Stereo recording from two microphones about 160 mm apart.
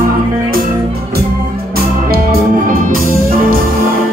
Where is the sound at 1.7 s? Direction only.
70° right (ahead or behind).